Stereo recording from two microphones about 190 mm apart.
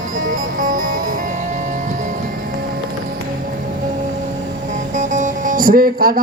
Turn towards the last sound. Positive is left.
turn(degrees=-50)  # may be behind; listen again after turning